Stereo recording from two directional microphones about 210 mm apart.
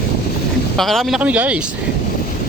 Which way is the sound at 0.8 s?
Centre (ahead or behind).